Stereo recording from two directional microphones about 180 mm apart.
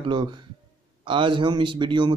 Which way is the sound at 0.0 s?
25° right (ahead or behind).